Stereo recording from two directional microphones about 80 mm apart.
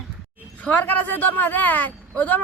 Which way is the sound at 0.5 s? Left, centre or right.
Centre.